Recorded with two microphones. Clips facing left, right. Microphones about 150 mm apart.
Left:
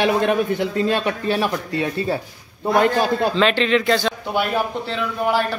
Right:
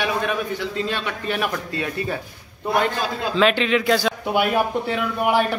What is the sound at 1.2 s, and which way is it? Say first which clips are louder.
Speech: left 4 dB; 30° left (ahead or behind).